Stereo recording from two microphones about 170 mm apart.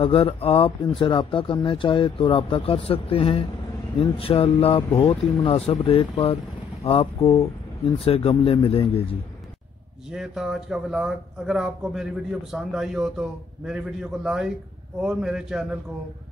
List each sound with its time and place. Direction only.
0.0 s speech: 35° left (ahead or behind)
10.1 s a man's voice: centre (ahead or behind)